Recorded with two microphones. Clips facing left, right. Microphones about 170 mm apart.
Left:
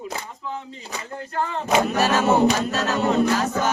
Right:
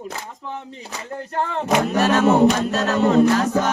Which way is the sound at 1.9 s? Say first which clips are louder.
Right 5 dB; 5° left (ahead or behind).